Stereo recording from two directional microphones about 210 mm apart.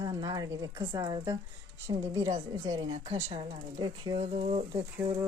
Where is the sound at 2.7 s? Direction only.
20° right (ahead or behind).